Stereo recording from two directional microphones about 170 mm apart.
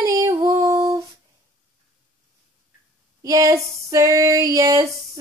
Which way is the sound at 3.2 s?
20° right (ahead or behind).